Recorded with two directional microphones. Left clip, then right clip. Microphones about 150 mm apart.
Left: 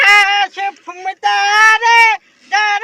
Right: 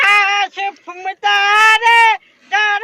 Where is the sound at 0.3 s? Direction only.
45° right (ahead or behind).